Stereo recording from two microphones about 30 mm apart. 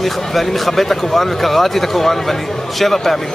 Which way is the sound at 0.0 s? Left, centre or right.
Centre.